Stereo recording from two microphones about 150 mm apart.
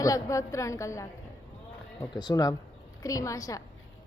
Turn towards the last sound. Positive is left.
turn(degrees=25)  # may be behind; listen again after turning